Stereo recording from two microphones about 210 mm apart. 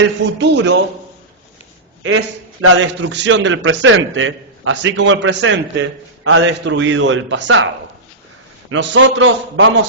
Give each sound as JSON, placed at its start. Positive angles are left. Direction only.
{"t": 0.3, "sound": "a man's voice", "side_deg": -55}
{"t": 2.0, "sound": "a man's voice", "side_deg": -75}
{"t": 8.7, "sound": "a man's voice", "side_deg": -60}